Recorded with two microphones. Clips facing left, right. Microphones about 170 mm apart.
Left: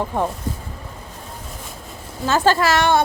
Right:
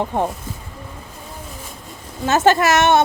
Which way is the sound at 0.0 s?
20° right (ahead or behind).